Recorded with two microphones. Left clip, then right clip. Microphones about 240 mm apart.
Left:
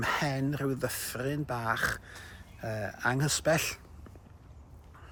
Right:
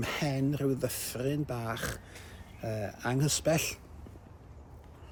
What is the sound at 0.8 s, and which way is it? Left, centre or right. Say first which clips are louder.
Speech: even; left.